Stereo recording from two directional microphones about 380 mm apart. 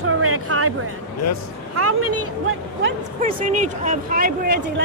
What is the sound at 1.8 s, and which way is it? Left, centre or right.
Speech, right.